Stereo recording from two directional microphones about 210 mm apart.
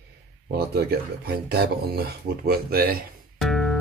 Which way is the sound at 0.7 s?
50° right (ahead or behind).